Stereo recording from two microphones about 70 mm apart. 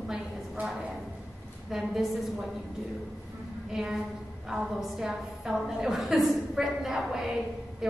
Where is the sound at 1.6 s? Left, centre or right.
Centre.